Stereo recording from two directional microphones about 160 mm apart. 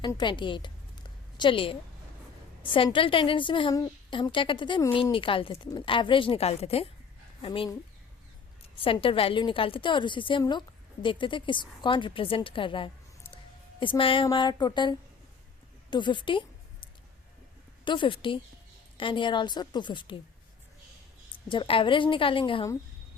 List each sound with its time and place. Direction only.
0.2 s a sound: 30° left (ahead or behind)
2.6 s a woman's voice: 30° left (ahead or behind)
8.8 s a woman's voice: 35° left (ahead or behind)
17.8 s a woman's voice: 30° left (ahead or behind)
21.3 s a woman's voice: 30° left (ahead or behind)